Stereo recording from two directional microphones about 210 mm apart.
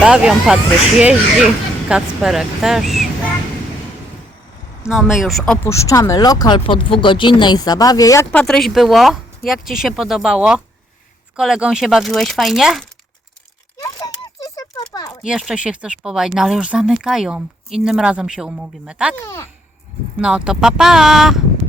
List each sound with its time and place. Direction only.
0.0 s speech: 5° right (ahead or behind)
4.9 s speech: centre (ahead or behind)
5.6 s speech: 15° left (ahead or behind)
13.7 s a sound: 15° left (ahead or behind)
15.2 s speech: centre (ahead or behind)
20.1 s speech: 5° right (ahead or behind)